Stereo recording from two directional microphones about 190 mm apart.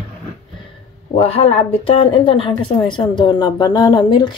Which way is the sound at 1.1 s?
30° left (ahead or behind).